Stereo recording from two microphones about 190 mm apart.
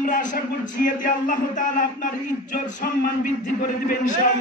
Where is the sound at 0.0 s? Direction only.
45° left (ahead or behind).